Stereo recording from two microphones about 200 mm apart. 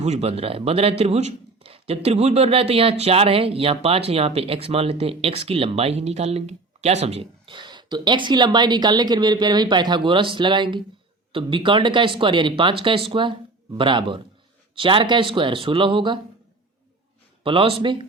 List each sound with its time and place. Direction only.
0.0 s speech: 35° right (ahead or behind)
17.4 s speech: 25° right (ahead or behind)